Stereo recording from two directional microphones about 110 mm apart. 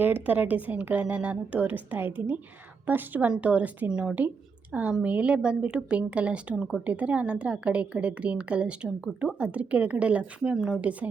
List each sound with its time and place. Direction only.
0.0 s a woman's voice: 15° right (ahead or behind)
6.6 s speech: centre (ahead or behind)
6.8 s a woman's voice: 10° right (ahead or behind)